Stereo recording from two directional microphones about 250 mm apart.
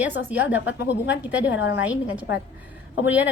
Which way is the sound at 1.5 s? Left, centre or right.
Left.